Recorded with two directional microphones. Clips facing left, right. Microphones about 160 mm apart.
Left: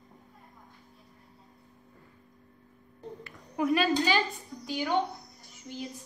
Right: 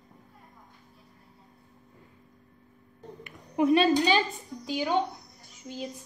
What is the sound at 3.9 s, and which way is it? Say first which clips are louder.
A woman's voice: right 3 dB; 20° right (ahead or behind).